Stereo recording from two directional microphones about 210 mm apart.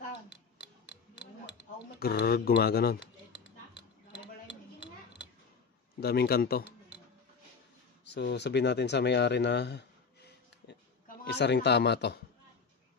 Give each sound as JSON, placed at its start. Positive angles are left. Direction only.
{"t": 2.0, "sound": "speech", "side_deg": 50}
{"t": 5.9, "sound": "speech", "side_deg": 50}
{"t": 8.0, "sound": "speech", "side_deg": 55}